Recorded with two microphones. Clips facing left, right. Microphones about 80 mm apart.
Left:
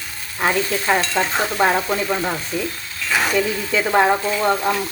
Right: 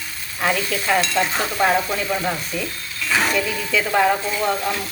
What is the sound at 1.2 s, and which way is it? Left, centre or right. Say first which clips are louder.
Stir: left 1 dB; left.